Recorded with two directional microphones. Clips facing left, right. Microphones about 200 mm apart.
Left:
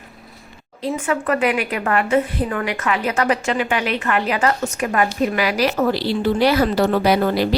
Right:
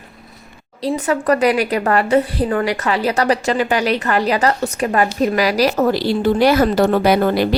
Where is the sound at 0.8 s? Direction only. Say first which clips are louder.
Right 4 dB; 35° right (ahead or behind).